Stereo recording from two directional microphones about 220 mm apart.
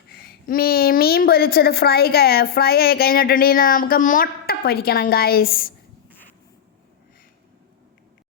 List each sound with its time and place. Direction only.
0.1 s a woman's voice: 45° left (ahead or behind)